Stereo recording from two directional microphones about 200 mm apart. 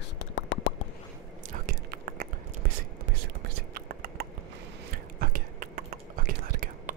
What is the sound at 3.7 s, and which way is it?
Whispering, 50° right (ahead or behind).